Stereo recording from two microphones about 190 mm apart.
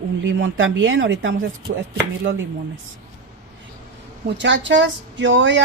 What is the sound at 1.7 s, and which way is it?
Speech, 55° right (ahead or behind).